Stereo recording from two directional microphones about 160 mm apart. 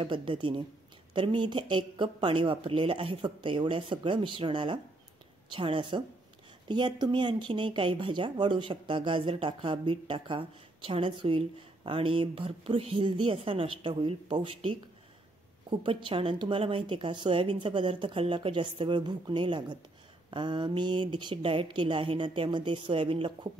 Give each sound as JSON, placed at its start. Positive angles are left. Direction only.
{"t": 0.0, "sound": "speech", "side_deg": -30}
{"t": 15.8, "sound": "speech", "side_deg": -30}